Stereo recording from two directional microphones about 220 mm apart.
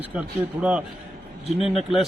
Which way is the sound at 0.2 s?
5° right (ahead or behind).